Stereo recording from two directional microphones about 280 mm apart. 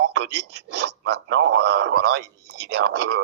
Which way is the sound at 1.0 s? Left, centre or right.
Right.